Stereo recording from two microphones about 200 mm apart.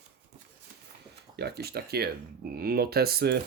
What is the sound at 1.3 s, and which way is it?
Speech, 55° right (ahead or behind).